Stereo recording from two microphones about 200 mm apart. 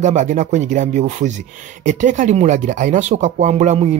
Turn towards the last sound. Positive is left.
turn(degrees=-35)  # may be behind; listen again after turning